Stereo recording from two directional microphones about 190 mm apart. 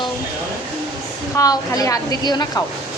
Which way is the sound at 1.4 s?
20° left (ahead or behind).